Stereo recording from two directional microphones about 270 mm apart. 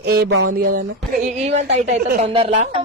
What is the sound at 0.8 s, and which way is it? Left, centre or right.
A woman's voice, right.